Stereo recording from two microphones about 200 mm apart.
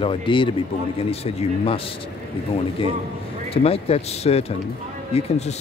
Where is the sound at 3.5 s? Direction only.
30° left (ahead or behind).